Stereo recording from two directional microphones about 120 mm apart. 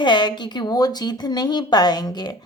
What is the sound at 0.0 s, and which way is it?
A woman's voice, 40° left (ahead or behind).